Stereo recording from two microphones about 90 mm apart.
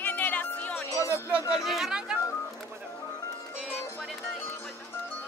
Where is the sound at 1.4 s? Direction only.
40° left (ahead or behind).